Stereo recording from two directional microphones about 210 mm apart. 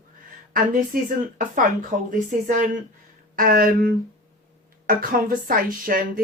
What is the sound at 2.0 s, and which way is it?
A woman's voice, 40° right (ahead or behind).